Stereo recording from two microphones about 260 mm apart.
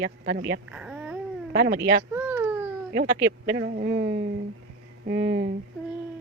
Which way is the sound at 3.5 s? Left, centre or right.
Right.